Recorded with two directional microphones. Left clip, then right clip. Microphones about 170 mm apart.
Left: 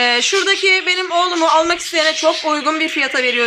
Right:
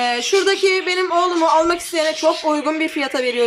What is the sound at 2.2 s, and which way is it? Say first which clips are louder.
Speech: left 1 dB; 10° left (ahead or behind).